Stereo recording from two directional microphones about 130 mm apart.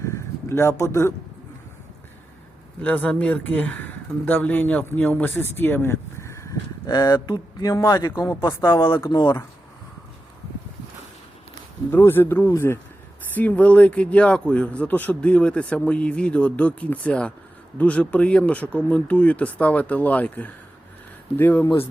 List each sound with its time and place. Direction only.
0.0 s a sound: 20° left (ahead or behind)
2.8 s speech: 10° left (ahead or behind)
9.0 s speech: 35° left (ahead or behind)
11.9 s speech: 15° left (ahead or behind)